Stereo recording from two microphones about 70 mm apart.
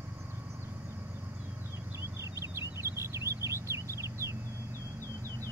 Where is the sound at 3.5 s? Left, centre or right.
Right.